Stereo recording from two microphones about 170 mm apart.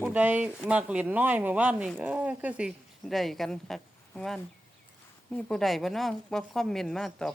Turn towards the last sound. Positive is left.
turn(degrees=0)  # may be behind; listen again after turning